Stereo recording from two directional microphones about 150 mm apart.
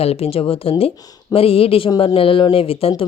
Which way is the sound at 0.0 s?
40° left (ahead or behind).